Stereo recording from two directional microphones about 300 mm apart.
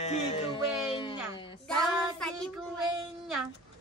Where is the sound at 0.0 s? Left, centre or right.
Left.